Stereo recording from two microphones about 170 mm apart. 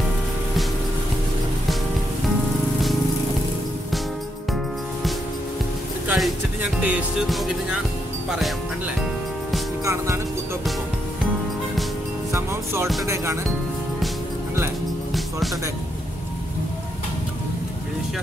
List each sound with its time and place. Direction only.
6.0 s music: 5° right (ahead or behind)
8.3 s speech: centre (ahead or behind)
9.8 s speech: 15° right (ahead or behind)
12.3 s speech: 15° right (ahead or behind)